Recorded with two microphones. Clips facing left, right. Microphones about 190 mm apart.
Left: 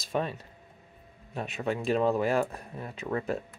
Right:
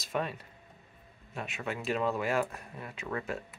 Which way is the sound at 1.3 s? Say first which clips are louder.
Left 6 dB; 35° left (ahead or behind).